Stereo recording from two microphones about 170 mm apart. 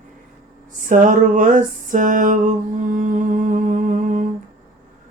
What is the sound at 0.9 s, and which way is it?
Music, 50° right (ahead or behind).